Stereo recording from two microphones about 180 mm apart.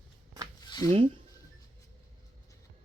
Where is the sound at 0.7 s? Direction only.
20° left (ahead or behind).